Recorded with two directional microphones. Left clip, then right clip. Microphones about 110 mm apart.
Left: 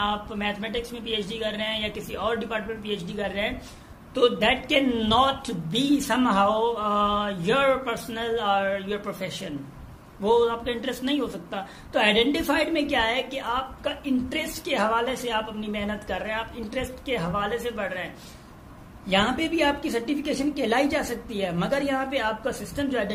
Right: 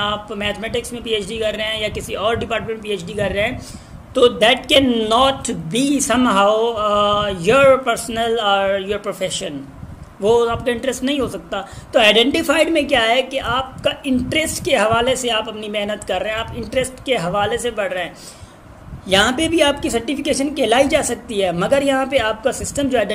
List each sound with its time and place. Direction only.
0.0 s a woman's voice: 30° right (ahead or behind)